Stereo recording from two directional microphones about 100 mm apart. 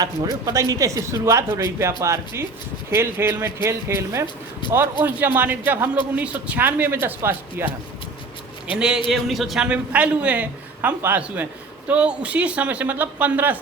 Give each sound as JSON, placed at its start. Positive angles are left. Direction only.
{"t": 0.0, "sound": "a man's voice", "side_deg": -35}
{"t": 8.7, "sound": "a man's voice", "side_deg": -10}